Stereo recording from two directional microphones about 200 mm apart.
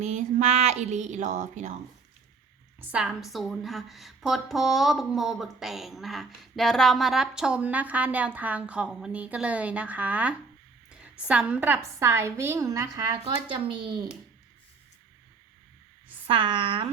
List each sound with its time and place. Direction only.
0.0 s speech: 35° right (ahead or behind)
2.8 s a woman's voice: 5° right (ahead or behind); by 14.1 s 20° right (ahead or behind)
16.2 s speech: 25° right (ahead or behind)